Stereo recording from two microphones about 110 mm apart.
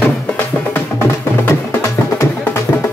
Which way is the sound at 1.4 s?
25° left (ahead or behind).